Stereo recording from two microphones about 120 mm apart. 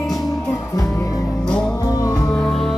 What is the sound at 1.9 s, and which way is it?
Music, 30° left (ahead or behind).